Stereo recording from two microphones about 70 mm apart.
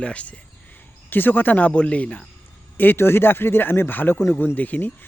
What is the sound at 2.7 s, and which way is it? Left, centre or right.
Speech, left.